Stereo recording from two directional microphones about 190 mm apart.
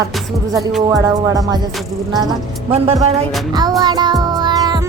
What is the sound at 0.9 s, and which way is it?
A woman's voice, 20° right (ahead or behind).